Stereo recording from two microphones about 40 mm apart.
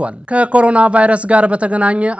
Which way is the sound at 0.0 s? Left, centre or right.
Right.